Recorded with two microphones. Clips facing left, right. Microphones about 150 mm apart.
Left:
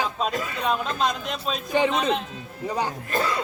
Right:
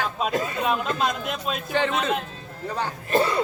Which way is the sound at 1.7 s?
15° left (ahead or behind).